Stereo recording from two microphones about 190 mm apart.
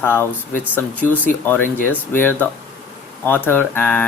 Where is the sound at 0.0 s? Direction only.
10° left (ahead or behind).